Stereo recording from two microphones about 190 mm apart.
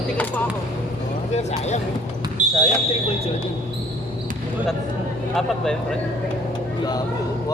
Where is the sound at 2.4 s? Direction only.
40° right (ahead or behind).